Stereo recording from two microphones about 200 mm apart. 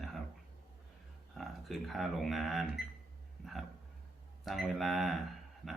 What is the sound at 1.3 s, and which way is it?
Speech, centre (ahead or behind).